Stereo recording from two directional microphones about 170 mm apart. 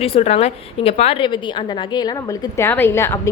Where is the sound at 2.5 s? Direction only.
15° left (ahead or behind).